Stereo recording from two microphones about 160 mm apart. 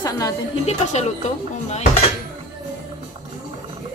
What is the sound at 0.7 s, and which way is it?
Speech, 45° left (ahead or behind).